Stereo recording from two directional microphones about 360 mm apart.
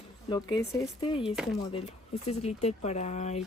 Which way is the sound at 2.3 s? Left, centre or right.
Centre.